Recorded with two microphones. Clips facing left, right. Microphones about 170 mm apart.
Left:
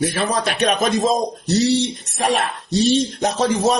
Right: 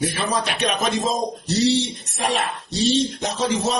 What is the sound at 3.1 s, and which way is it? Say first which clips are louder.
Speech: left 4 dB; 45° left (ahead or behind).